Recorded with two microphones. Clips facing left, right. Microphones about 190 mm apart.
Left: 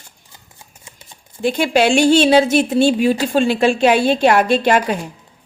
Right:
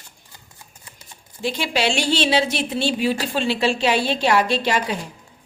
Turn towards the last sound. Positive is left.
turn(degrees=50)  # may be behind; listen again after turning